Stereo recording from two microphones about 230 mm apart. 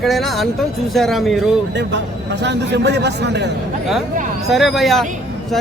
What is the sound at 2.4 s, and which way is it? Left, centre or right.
A man's voice, right.